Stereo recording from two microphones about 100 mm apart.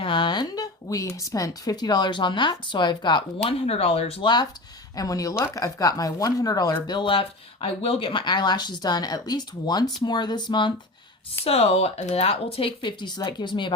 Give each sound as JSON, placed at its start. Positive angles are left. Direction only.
{"t": 0.0, "sound": "speech", "side_deg": 55}
{"t": 3.4, "sound": "speech", "side_deg": 90}
{"t": 4.2, "sound": "speech", "side_deg": 50}
{"t": 4.9, "sound": "speech", "side_deg": 35}
{"t": 6.8, "sound": "speech", "side_deg": 50}
{"t": 11.4, "sound": "speech", "side_deg": 90}